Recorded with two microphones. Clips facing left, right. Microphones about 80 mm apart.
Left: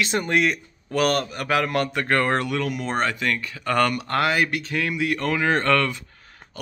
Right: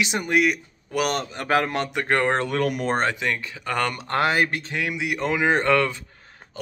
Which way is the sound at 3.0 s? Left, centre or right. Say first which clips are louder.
Even; right.